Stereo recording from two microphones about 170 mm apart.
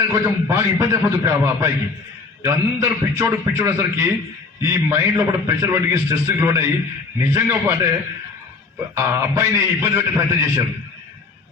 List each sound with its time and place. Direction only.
0.1 s a man's voice: 15° right (ahead or behind)
9.0 s a man's voice: 15° right (ahead or behind)